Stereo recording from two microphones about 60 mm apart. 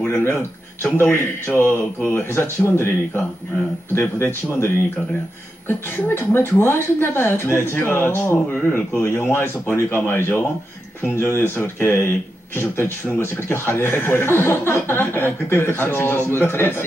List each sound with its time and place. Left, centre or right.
0.1 s a man's voice: left